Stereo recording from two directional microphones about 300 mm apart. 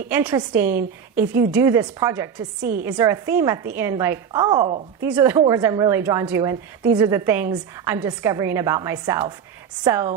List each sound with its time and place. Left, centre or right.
0.1 s a woman's voice: centre
2.6 s a woman's voice: right
2.8 s a woman's voice: centre